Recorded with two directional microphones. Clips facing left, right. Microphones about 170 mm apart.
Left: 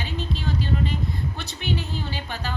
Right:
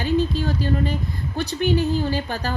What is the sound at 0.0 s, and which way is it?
Speech, 45° right (ahead or behind).